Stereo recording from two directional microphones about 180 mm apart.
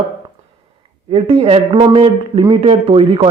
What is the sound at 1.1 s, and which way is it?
Speech, 35° right (ahead or behind).